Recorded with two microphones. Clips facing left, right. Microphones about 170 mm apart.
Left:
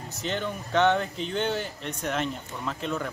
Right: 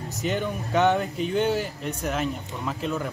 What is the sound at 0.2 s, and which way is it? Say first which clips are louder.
Speech: right 3 dB; 10° right (ahead or behind).